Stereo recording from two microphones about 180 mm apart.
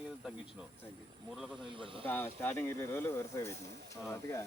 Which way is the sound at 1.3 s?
Centre (ahead or behind).